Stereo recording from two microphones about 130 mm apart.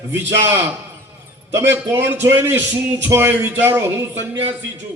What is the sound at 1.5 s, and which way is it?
Speech, 20° right (ahead or behind).